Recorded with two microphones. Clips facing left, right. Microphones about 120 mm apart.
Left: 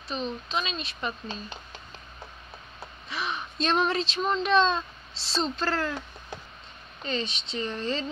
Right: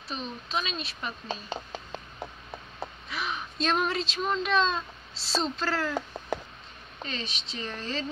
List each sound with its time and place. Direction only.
0.1 s speech: centre (ahead or behind)
3.1 s speech: centre (ahead or behind)
7.1 s speech: centre (ahead or behind)